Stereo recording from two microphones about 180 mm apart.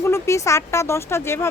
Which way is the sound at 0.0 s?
15° left (ahead or behind).